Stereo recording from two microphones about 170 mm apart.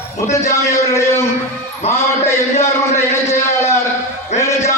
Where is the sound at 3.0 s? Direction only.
15° left (ahead or behind).